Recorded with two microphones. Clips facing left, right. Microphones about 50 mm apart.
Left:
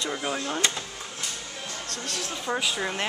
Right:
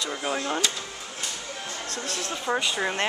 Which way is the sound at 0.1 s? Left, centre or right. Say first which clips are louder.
Right 3 dB; centre.